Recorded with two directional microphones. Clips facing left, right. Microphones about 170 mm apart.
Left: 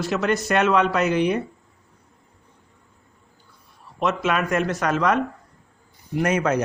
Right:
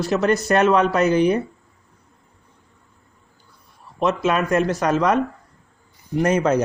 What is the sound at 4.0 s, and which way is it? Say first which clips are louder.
Speech: right 3 dB; 35° right (ahead or behind).